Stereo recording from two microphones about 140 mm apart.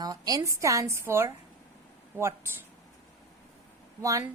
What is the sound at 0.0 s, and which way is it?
Speech, 25° right (ahead or behind).